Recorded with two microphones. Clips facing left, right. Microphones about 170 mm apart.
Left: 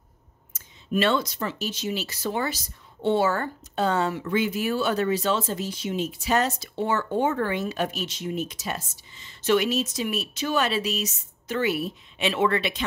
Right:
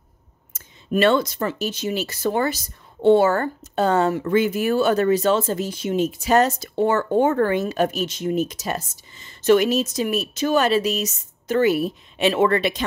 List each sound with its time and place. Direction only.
0.9 s speech: 55° right (ahead or behind)